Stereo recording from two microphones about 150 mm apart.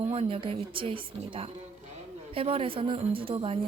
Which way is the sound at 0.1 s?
40° right (ahead or behind).